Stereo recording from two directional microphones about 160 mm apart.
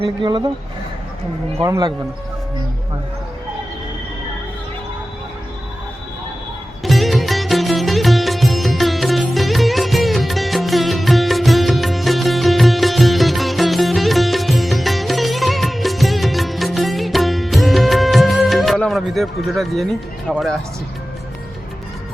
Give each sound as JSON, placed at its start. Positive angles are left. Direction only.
{"t": 0.0, "sound": "speech", "side_deg": -30}
{"t": 1.5, "sound": "speech", "side_deg": -20}
{"t": 6.8, "sound": "music", "side_deg": 0}
{"t": 20.3, "sound": "speech", "side_deg": 0}